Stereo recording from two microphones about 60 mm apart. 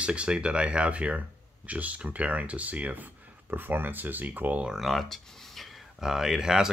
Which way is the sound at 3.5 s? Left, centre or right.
Right.